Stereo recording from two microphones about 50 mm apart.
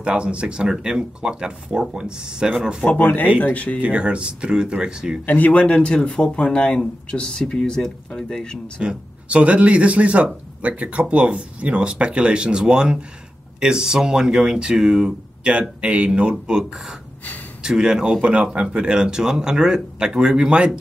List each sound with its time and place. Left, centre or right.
0.0 s speech: right
2.8 s speech: left
3.8 s speech: right
5.2 s speech: left
5.6 s speech: left
8.8 s speech: right
17.6 s speech: centre